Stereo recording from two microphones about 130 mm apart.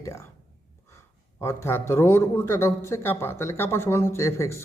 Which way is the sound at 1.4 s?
20° left (ahead or behind).